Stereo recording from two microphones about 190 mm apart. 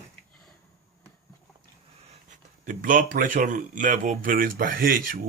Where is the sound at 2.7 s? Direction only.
45° right (ahead or behind).